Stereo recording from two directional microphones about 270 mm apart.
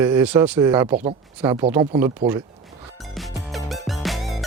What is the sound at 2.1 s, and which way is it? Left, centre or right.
Speech, centre.